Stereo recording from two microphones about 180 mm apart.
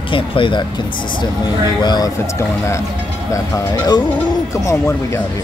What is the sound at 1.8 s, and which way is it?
Speech, 20° left (ahead or behind).